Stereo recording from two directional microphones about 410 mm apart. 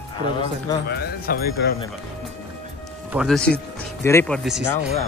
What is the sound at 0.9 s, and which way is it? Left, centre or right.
Speech, left.